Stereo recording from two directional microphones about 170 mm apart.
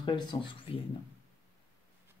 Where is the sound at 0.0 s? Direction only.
25° left (ahead or behind).